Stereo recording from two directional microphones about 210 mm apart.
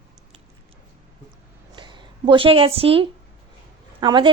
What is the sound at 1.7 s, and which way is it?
A woman's voice, 20° right (ahead or behind).